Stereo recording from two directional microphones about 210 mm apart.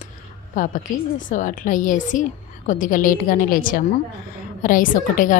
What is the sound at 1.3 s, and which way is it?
A woman's voice, 40° left (ahead or behind).